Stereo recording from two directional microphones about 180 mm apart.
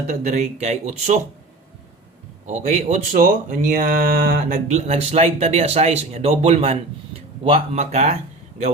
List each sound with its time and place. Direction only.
0.1 s speech: 40° right (ahead or behind)
2.5 s a man's voice: 40° right (ahead or behind)